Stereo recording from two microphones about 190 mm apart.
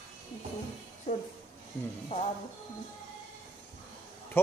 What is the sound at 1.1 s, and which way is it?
A child's voice, 35° left (ahead or behind).